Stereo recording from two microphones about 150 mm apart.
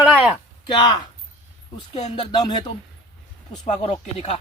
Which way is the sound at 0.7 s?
30° left (ahead or behind).